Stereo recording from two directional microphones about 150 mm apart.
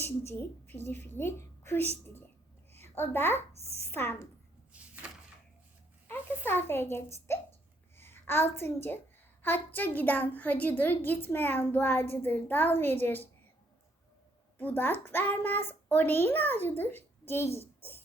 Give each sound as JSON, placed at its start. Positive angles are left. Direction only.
{"t": 0.0, "sound": "a woman's voice", "side_deg": 15}
{"t": 3.5, "sound": "a child's voice", "side_deg": -45}
{"t": 3.9, "sound": "a child's voice", "side_deg": 15}
{"t": 4.7, "sound": "a sound", "side_deg": -10}
{"t": 6.1, "sound": "a child's voice", "side_deg": 15}
{"t": 14.6, "sound": "a child's voice", "side_deg": 15}